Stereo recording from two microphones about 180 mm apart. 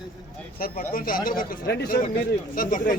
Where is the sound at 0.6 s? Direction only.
50° left (ahead or behind).